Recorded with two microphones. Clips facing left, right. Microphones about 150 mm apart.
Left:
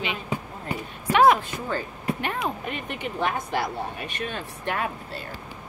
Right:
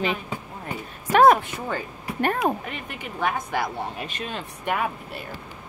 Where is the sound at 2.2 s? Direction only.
55° right (ahead or behind).